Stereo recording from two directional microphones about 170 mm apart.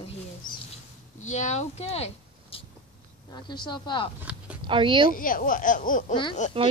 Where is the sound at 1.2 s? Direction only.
45° left (ahead or behind).